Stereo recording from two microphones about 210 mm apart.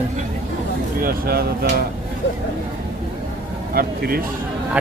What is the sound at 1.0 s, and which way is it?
Speech, 45° right (ahead or behind).